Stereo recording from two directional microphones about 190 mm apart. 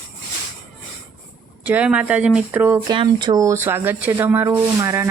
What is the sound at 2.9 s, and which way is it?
Speech, 25° right (ahead or behind).